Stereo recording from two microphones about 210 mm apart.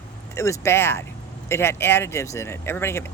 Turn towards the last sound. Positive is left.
turn(degrees=10)  # may be behind; listen again after turning